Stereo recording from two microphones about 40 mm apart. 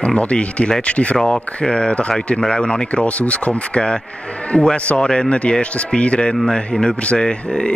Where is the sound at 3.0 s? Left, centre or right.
Left.